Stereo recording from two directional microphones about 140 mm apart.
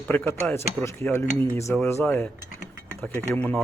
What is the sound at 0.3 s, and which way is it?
Speech, 15° left (ahead or behind).